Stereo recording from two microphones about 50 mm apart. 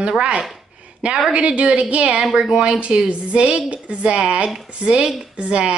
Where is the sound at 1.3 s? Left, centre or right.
Right.